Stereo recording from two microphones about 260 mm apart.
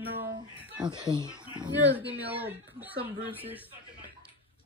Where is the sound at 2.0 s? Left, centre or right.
Centre.